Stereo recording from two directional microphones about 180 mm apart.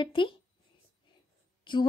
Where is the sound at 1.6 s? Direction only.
25° left (ahead or behind).